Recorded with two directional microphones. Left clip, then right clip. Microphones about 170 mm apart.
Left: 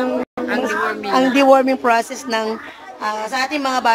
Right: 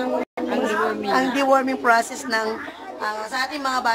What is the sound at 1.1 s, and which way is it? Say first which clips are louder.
Speech: left 7 dB; 15° left (ahead or behind).